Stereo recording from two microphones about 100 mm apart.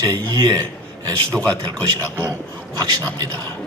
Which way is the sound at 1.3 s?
10° left (ahead or behind).